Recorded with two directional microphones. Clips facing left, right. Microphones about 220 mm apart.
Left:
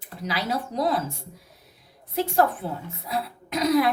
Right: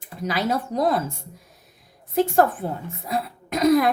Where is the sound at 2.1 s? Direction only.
50° right (ahead or behind).